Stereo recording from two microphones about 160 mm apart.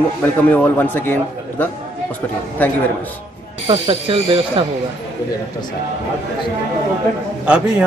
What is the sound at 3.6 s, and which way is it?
Speech, 35° right (ahead or behind).